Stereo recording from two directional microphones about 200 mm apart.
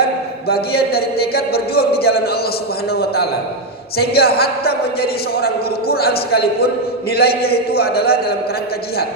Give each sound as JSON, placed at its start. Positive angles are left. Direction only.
{"t": 0.0, "sound": "a man's voice", "side_deg": 50}